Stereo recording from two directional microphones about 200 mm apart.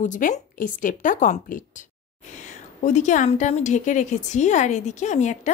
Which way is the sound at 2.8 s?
35° left (ahead or behind).